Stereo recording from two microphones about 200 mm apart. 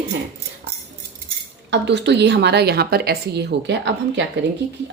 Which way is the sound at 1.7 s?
60° right (ahead or behind).